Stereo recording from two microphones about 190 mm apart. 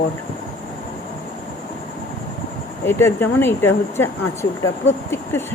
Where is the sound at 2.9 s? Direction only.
15° left (ahead or behind).